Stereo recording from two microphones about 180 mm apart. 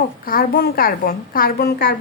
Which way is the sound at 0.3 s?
55° left (ahead or behind).